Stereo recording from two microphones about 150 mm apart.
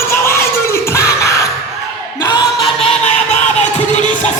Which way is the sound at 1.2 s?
20° left (ahead or behind).